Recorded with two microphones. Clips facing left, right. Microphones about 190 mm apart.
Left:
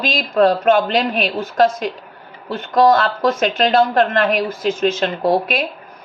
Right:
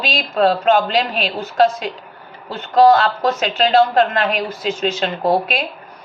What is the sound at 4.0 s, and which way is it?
Speech, 50° left (ahead or behind).